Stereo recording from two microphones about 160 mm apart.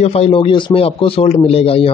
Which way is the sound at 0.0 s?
40° left (ahead or behind).